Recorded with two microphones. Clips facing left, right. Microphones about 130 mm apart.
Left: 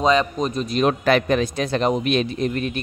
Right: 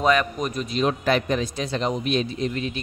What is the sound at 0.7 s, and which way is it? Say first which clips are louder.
A man's voice: left 4 dB; 60° left (ahead or behind).